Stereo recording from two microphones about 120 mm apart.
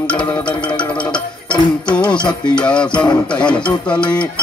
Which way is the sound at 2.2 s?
40° left (ahead or behind).